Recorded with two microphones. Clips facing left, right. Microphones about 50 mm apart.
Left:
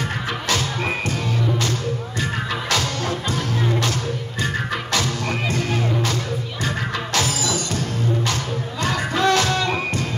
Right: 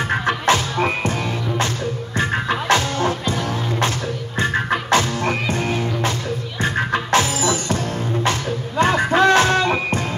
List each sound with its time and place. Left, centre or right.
0.3 s music: right
2.7 s music: right
4.9 s music: right